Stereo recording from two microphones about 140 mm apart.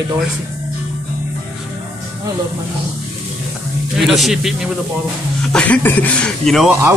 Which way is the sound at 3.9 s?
Centre (ahead or behind).